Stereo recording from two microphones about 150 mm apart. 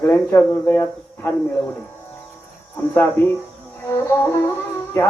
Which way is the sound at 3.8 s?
20° left (ahead or behind).